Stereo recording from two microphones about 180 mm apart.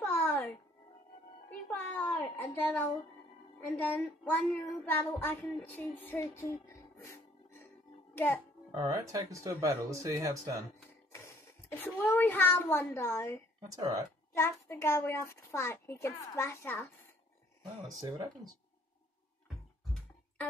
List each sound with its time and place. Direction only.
0.0 s music: 10° left (ahead or behind)
1.7 s a sound: 10° left (ahead or behind)
3.6 s a woman's voice: 5° left (ahead or behind)
8.1 s music: 10° left (ahead or behind)
8.7 s speech: 20° right (ahead or behind)
11.1 s a child's voice: 15° left (ahead or behind)
13.6 s speech: 20° right (ahead or behind)
14.3 s a child's voice: 15° left (ahead or behind)
17.8 s speech: 20° right (ahead or behind)